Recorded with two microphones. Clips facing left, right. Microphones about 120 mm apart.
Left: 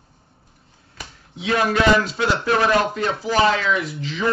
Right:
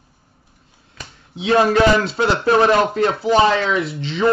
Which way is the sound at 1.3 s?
30° right (ahead or behind).